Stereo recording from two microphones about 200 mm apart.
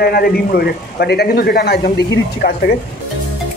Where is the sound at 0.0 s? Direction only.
50° left (ahead or behind).